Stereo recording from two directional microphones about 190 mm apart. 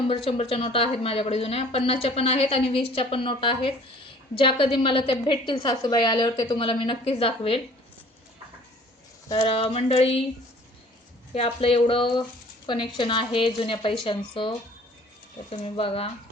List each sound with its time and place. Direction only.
0.1 s speech: 30° left (ahead or behind)
9.3 s speech: 30° left (ahead or behind)
11.3 s speech: 30° left (ahead or behind)